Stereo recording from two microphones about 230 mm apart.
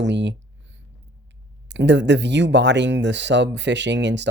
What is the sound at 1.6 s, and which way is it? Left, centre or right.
Speech, right.